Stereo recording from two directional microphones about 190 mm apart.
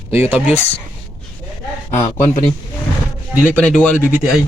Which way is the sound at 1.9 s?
35° left (ahead or behind).